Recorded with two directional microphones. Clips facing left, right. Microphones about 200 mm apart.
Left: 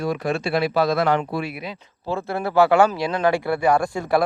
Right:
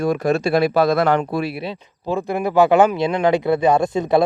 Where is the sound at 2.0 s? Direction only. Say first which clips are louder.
Right 4 dB; 15° right (ahead or behind).